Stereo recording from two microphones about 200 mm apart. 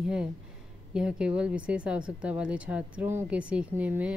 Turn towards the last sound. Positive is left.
turn(degrees=-5)  # may be behind; listen again after turning